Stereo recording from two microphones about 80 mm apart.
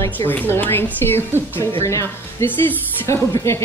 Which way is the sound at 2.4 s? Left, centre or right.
Left.